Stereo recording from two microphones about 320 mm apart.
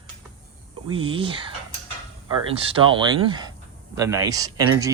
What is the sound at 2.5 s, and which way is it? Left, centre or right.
Speech, centre.